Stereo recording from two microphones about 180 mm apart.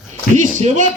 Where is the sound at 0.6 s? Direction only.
45° right (ahead or behind).